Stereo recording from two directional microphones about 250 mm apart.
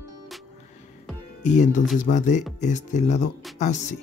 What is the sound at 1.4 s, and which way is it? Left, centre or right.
Speech, left.